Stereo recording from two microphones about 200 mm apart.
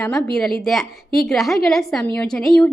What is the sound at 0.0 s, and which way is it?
A woman's voice, 5° left (ahead or behind).